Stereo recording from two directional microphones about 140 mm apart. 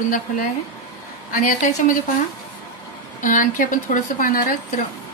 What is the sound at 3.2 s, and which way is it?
A woman's voice, 65° left (ahead or behind).